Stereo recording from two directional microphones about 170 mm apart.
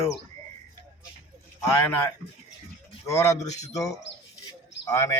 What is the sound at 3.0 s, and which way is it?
Speech, 20° left (ahead or behind).